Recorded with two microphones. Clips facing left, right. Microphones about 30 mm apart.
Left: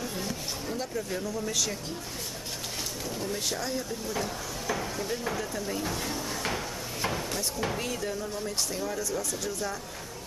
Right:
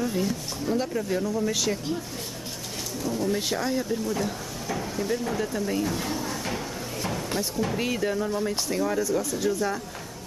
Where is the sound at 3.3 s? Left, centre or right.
Centre.